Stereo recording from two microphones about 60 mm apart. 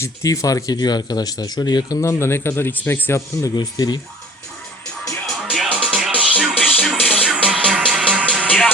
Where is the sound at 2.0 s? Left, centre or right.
Left.